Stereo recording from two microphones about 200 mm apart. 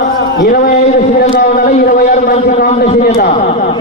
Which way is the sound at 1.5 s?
45° left (ahead or behind).